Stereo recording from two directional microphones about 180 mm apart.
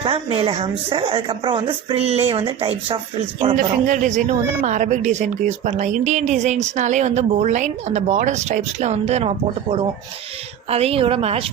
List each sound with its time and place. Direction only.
0.0 s a woman's voice: 30° right (ahead or behind)
3.5 s speech: 45° right (ahead or behind)